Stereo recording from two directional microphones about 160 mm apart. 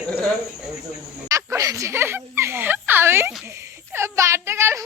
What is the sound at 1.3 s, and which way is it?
Speech, 20° right (ahead or behind).